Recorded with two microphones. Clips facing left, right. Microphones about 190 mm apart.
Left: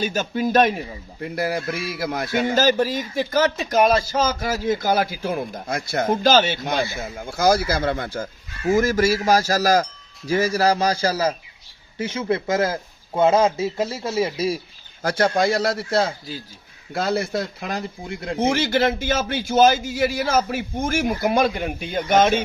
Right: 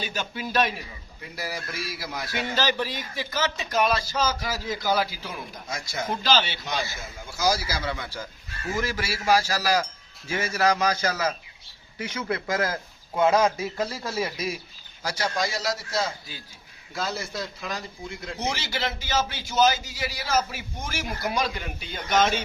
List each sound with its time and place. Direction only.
0.0 s a man's voice: 45° left (ahead or behind)
15.0 s a man's voice: 55° left (ahead or behind)